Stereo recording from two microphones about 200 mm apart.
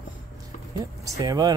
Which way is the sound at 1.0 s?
15° right (ahead or behind).